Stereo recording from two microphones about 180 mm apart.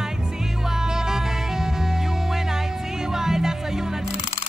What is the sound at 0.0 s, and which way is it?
Music, 5° right (ahead or behind).